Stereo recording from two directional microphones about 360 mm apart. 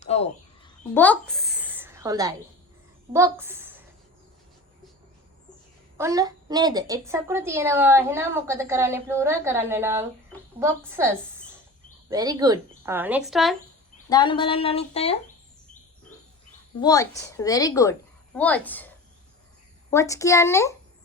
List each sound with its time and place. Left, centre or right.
0.0 s a sound: centre
0.9 s a woman's voice: centre
6.0 s a woman's voice: centre
14.1 s speech: centre
16.8 s a woman's voice: centre
19.9 s speech: centre